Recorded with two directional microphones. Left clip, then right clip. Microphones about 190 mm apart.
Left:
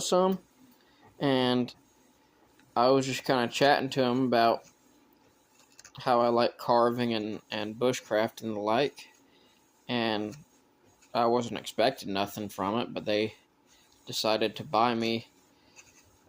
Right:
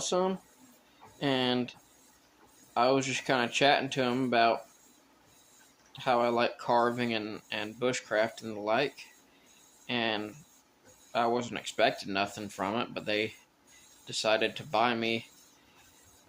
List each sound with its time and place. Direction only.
0.0 s speech: 55° left (ahead or behind)
5.9 s speech: 45° left (ahead or behind)